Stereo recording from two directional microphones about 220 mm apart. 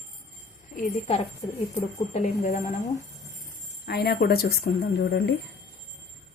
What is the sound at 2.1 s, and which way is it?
Speech, 30° left (ahead or behind).